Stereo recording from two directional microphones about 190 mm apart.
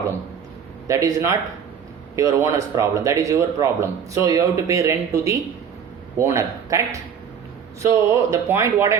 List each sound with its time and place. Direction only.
0.9 s speech: 15° right (ahead or behind)